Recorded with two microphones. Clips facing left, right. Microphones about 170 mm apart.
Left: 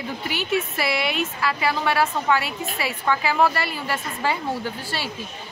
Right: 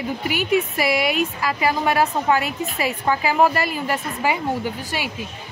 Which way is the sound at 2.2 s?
40° right (ahead or behind).